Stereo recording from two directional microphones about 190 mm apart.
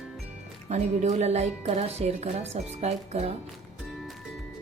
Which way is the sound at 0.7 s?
35° right (ahead or behind).